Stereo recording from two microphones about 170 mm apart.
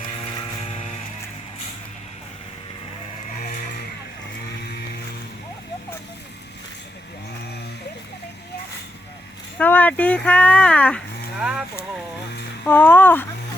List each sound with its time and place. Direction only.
0.2 s vehicle: 35° left (ahead or behind)
3.3 s vehicle: 50° left (ahead or behind)
4.6 s vehicle: 65° left (ahead or behind)
9.6 s speech: 10° left (ahead or behind)
11.3 s a sound: 5° right (ahead or behind)
12.6 s speech: 10° left (ahead or behind)